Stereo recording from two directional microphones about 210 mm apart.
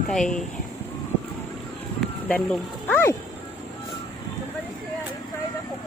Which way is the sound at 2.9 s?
10° left (ahead or behind).